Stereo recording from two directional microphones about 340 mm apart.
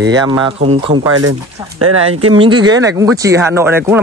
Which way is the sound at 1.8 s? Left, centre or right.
Right.